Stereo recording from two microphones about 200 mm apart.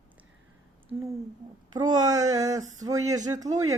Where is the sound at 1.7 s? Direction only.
20° right (ahead or behind).